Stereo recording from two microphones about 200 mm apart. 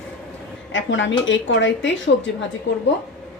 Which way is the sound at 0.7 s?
70° left (ahead or behind).